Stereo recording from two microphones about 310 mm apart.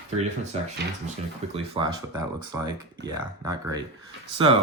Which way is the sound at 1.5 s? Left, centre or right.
Centre.